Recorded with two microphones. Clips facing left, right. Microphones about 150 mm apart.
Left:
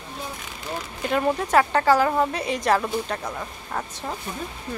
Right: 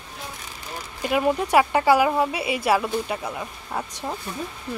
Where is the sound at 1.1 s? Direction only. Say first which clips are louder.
Right 1 dB; 10° right (ahead or behind).